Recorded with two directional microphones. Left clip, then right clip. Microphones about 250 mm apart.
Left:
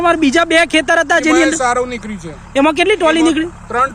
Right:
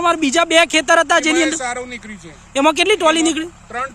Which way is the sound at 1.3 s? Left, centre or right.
Centre.